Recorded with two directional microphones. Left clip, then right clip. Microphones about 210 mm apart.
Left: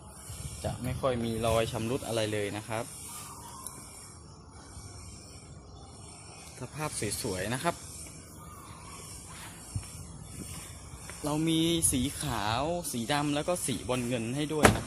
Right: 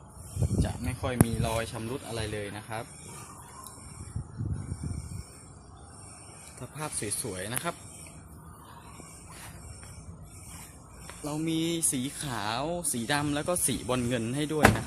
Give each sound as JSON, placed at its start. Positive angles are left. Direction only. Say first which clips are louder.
{"t": 0.9, "sound": "speech", "louder": "even", "side_deg": 15}
{"t": 6.6, "sound": "speech", "louder": "left 1 dB", "side_deg": 5}
{"t": 7.3, "sound": "speech", "louder": "left 4 dB", "side_deg": 20}
{"t": 11.2, "sound": "speech", "louder": "left 2 dB", "side_deg": 25}